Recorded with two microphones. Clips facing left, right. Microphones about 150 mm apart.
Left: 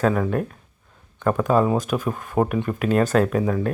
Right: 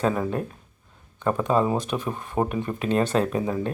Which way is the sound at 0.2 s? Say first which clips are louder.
Left 3 dB; 25° right (ahead or behind).